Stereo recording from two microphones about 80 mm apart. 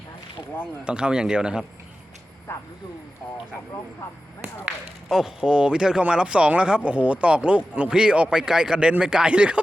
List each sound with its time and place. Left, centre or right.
0.9 s speech: centre
2.5 s speech: left
5.0 s speech: centre